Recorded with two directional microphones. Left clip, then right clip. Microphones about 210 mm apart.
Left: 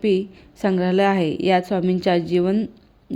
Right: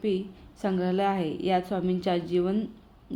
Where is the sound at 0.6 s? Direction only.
40° left (ahead or behind).